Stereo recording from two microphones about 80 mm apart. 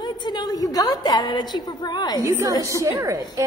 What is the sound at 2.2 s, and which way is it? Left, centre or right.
A woman's voice, right.